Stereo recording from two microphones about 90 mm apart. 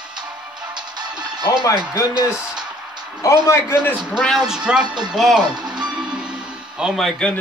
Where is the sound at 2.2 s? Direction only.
10° right (ahead or behind).